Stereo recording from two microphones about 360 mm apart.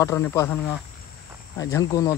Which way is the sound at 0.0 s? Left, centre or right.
Centre.